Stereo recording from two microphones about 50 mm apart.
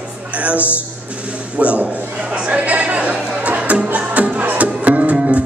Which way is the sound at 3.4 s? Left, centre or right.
Right.